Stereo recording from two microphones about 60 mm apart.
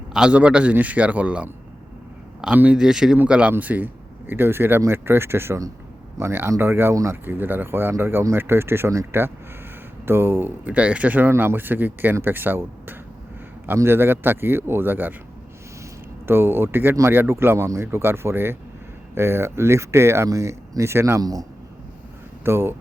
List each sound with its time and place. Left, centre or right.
0.1 s a man's voice: centre
2.7 s speech: centre
3.6 s speech: right
10.8 s a man's voice: right
11.3 s speech: right
16.2 s speech: right
20.2 s speech: right
22.4 s speech: right